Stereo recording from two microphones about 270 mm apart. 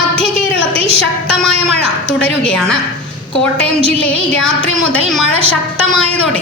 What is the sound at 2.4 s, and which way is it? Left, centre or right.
Speech, centre.